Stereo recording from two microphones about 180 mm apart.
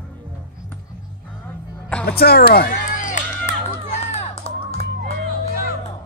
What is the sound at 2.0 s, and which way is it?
Speech, 60° left (ahead or behind).